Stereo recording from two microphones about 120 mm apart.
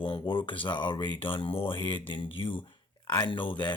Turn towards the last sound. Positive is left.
turn(degrees=45)  # may be behind; listen again after turning